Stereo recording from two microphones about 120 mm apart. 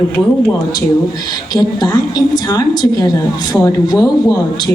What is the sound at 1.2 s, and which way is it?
A woman's voice, 35° left (ahead or behind).